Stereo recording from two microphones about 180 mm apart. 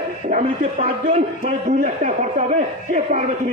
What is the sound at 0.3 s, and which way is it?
Speech, 45° right (ahead or behind).